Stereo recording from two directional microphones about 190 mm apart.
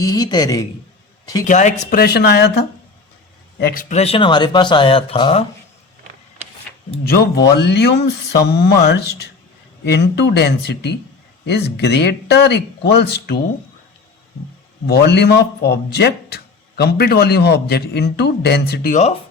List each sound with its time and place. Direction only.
0.0 s speech: 20° left (ahead or behind)
1.5 s speech: 40° left (ahead or behind); by 2.5 s 60° left (ahead or behind)
3.6 s speech: 50° left (ahead or behind); by 5.5 s 30° left (ahead or behind)
7.0 s a man's voice: 55° left (ahead or behind)
14.8 s a man's voice: 60° left (ahead or behind)